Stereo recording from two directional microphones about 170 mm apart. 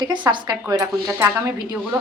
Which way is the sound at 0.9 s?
10° right (ahead or behind).